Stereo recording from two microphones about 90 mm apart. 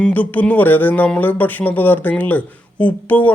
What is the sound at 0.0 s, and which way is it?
Speech, 15° left (ahead or behind).